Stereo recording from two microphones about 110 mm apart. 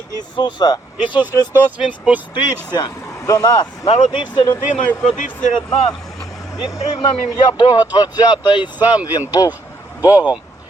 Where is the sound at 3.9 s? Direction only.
45° left (ahead or behind).